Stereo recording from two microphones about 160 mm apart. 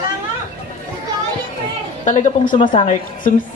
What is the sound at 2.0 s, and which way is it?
A woman's voice, 50° left (ahead or behind).